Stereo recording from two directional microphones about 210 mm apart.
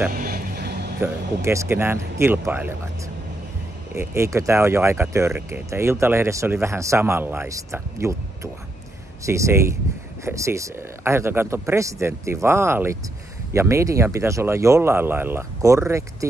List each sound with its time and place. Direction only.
0.1 s music: 45° right (ahead or behind)
1.0 s speech: 15° right (ahead or behind)
3.9 s speech: 10° right (ahead or behind)
9.2 s speech: 15° right (ahead or behind)